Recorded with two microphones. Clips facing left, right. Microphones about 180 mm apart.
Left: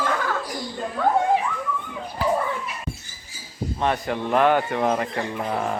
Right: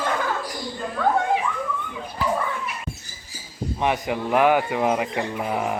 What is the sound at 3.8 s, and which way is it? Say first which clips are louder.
A man's voice: even; 15° right (ahead or behind).